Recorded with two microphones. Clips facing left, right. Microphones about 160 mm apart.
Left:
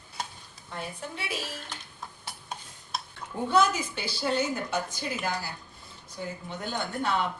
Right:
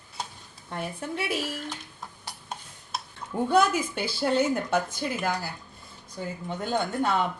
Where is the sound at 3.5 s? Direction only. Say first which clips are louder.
Right 1 dB; 55° right (ahead or behind).